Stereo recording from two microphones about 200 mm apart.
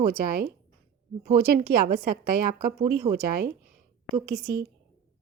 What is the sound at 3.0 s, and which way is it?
Speech, 25° right (ahead or behind).